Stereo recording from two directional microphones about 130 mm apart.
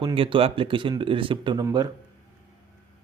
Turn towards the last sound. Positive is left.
turn(degrees=-30)  # may be behind; listen again after turning